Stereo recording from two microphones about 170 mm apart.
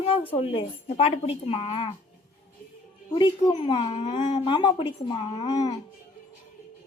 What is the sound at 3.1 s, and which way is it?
A woman's voice, 25° left (ahead or behind).